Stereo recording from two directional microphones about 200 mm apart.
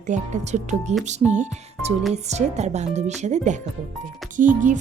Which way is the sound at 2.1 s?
35° right (ahead or behind).